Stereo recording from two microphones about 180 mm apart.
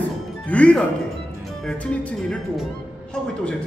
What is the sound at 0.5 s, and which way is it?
Speech, 5° left (ahead or behind).